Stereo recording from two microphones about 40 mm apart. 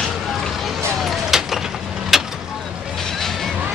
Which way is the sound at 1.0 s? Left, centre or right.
Centre.